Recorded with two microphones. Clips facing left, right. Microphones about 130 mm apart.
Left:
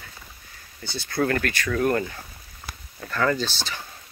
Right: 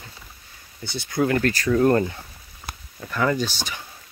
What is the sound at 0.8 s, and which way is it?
Speech, 20° right (ahead or behind).